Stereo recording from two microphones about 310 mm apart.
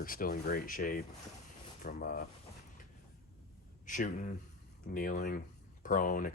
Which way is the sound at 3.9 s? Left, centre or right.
Left.